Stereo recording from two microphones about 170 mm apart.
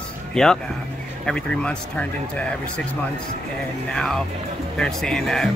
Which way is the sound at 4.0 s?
Centre (ahead or behind).